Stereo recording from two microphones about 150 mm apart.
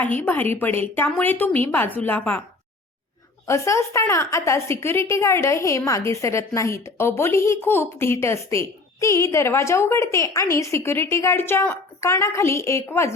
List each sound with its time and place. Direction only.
0.2 s a woman's voice: 15° left (ahead or behind)
3.4 s a woman's voice: 20° left (ahead or behind)